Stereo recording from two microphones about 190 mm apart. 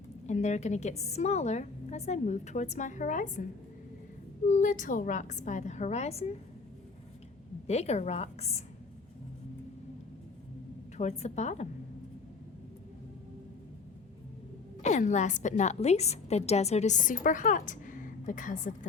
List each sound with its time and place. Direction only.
0.3 s a woman's voice: 40° left (ahead or behind)
4.4 s a woman's voice: 40° left (ahead or behind)
7.7 s a woman's voice: 35° left (ahead or behind)
10.9 s a woman's voice: 35° left (ahead or behind)
14.8 s a woman's voice: 40° left (ahead or behind)